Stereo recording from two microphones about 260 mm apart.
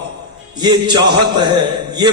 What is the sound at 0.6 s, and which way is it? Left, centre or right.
A man's voice, centre.